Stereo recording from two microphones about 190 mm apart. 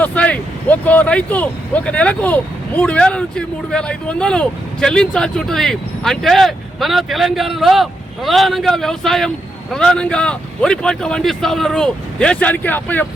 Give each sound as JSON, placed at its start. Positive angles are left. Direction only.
{"t": 0.0, "sound": "speech", "side_deg": 5}